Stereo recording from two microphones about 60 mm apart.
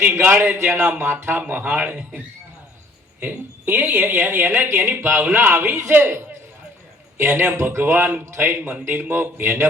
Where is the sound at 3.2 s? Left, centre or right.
Right.